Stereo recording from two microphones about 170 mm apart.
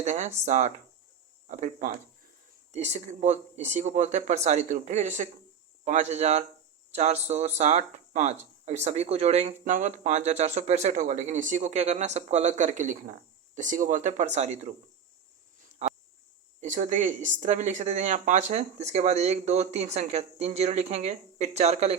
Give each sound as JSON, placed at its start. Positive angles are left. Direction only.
{"t": 0.0, "sound": "speech", "side_deg": -45}
{"t": 16.6, "sound": "speech", "side_deg": -45}